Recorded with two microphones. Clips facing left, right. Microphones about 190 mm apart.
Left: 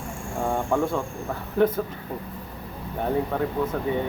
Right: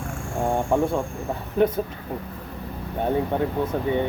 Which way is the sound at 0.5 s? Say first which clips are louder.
Right 2 dB; 20° right (ahead or behind).